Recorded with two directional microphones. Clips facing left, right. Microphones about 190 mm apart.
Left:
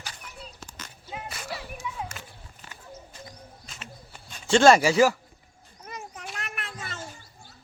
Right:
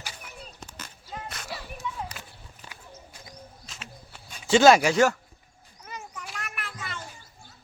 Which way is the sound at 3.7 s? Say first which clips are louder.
Left 1 dB; centre (ahead or behind).